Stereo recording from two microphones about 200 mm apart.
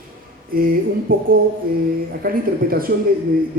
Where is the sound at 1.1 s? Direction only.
45° right (ahead or behind).